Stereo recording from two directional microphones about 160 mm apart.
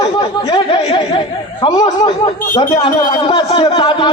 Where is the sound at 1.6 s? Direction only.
30° left (ahead or behind).